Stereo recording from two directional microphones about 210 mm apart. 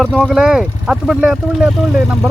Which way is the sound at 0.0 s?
Centre (ahead or behind).